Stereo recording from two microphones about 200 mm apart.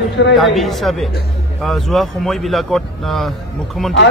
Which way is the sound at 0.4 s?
Centre (ahead or behind).